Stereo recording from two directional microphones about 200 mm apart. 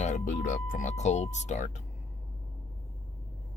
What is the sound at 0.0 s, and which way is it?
Speech, 40° left (ahead or behind).